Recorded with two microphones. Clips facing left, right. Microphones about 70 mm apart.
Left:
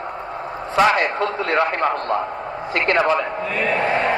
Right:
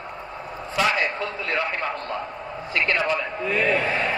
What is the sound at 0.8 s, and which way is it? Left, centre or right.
A man's voice, left.